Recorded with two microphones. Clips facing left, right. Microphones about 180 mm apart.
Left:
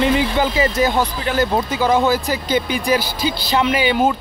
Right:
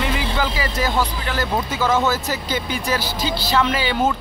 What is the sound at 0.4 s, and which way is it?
Speech, 20° left (ahead or behind).